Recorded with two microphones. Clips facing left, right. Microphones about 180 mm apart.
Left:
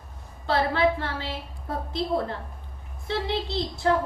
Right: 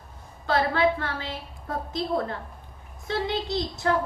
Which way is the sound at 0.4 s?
30° left (ahead or behind).